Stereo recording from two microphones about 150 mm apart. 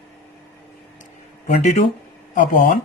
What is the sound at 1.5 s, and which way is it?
A man's voice, 50° left (ahead or behind).